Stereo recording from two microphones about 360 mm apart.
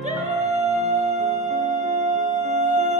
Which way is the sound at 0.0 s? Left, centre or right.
Centre.